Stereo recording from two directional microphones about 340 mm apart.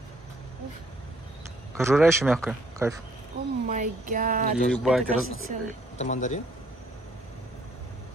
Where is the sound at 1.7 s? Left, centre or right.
Centre.